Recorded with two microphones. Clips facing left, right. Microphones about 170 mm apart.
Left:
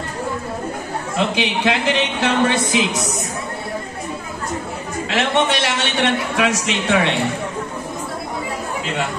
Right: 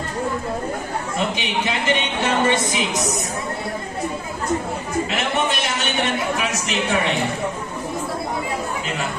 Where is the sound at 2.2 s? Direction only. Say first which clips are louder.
Left 1 dB; 70° left (ahead or behind).